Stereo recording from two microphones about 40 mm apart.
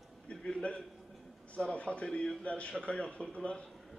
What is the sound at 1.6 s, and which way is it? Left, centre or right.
A man's voice, left.